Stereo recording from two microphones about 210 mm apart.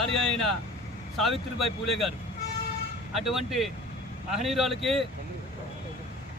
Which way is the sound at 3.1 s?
Centre (ahead or behind).